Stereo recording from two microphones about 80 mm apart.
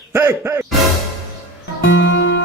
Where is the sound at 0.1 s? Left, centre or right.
Right.